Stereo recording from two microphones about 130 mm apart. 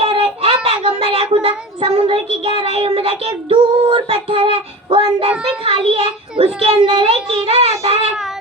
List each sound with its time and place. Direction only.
0.0 s a child's voice: 45° right (ahead or behind)